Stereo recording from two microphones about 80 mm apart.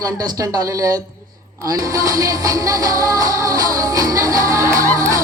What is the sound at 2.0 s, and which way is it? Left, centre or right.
Music, right.